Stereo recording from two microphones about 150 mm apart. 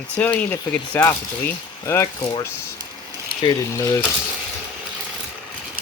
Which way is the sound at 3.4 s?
20° left (ahead or behind).